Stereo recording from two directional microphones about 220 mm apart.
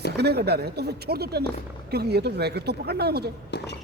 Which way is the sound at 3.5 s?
50° left (ahead or behind).